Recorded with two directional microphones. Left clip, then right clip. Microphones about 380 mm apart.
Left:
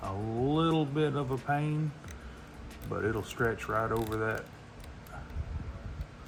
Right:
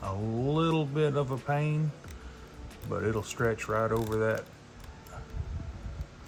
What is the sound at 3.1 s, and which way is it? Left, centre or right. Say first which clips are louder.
Speech: right 1 dB; right.